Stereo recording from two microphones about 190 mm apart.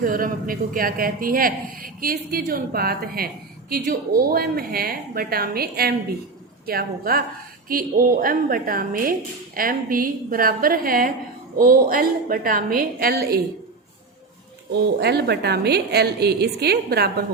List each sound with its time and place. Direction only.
0.0 s a man's voice: 50° right (ahead or behind)
14.7 s a woman's voice: 60° right (ahead or behind)